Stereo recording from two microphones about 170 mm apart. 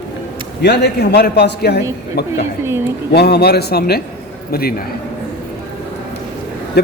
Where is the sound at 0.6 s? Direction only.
80° left; by 4.7 s 65° left (ahead or behind).